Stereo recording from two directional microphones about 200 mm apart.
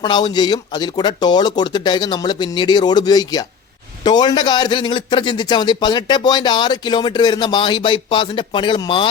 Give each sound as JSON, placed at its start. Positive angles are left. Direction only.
{"t": 0.0, "sound": "a man's voice", "side_deg": 20}